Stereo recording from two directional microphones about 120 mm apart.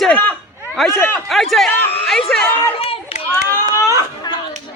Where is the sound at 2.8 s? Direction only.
55° left (ahead or behind).